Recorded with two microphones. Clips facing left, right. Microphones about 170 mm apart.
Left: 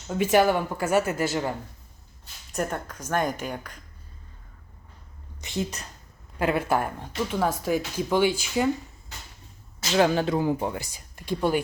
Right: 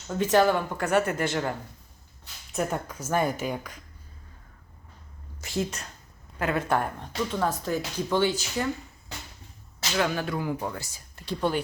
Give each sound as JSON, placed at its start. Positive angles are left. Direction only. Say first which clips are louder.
{"t": 0.2, "sound": "a woman's voice", "louder": "left 1 dB", "side_deg": 10}
{"t": 2.5, "sound": "speech", "louder": "even", "side_deg": -5}
{"t": 5.4, "sound": "a woman's voice", "louder": "even", "side_deg": 0}
{"t": 6.4, "sound": "speech", "louder": "left 2 dB", "side_deg": 10}
{"t": 10.0, "sound": "speech", "louder": "left 6 dB", "side_deg": 25}